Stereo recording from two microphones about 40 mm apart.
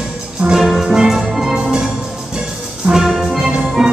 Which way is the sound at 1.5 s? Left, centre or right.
Centre.